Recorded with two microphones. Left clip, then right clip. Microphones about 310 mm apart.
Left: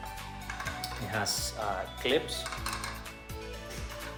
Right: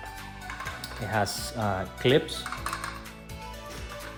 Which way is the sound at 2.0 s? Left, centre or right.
Right.